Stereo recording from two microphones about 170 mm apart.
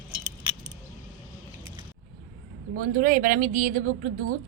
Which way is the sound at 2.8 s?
55° right (ahead or behind).